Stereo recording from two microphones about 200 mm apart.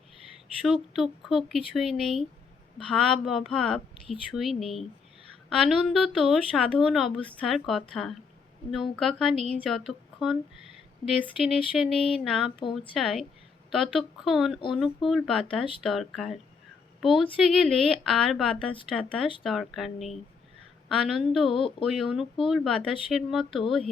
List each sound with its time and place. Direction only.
0.6 s a woman's voice: centre (ahead or behind)
21.5 s speech: 25° left (ahead or behind)
21.8 s speech: centre (ahead or behind)